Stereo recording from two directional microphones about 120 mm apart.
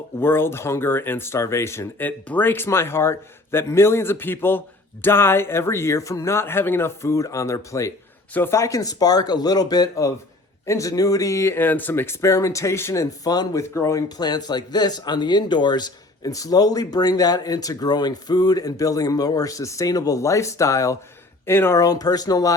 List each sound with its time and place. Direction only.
0.2 s speech: 20° left (ahead or behind)